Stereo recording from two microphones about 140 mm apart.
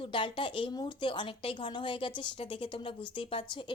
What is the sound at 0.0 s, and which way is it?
Speech, 40° left (ahead or behind).